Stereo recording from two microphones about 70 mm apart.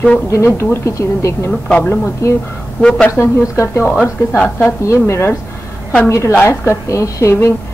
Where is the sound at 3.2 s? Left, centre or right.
Left.